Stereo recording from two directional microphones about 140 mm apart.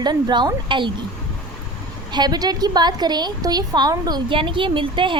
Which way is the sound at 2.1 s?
30° right (ahead or behind).